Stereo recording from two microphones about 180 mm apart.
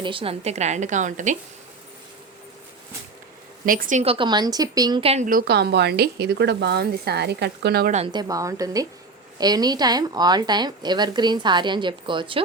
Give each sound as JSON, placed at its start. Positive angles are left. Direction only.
{"t": 0.0, "sound": "a woman's voice", "side_deg": -30}
{"t": 3.7, "sound": "a woman's voice", "side_deg": -50}
{"t": 4.0, "sound": "speech", "side_deg": -30}
{"t": 5.2, "sound": "speech", "side_deg": -55}
{"t": 8.0, "sound": "speech", "side_deg": -25}